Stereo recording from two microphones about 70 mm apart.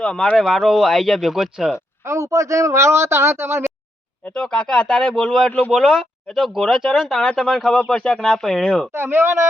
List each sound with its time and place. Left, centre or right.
0.0 s speech: centre
0.3 s speech: centre
2.0 s a man's voice: right
4.3 s speech: centre
5.5 s speech: left
5.7 s speech: centre
8.9 s speech: right